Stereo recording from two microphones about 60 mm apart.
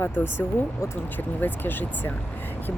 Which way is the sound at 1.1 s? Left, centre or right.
Left.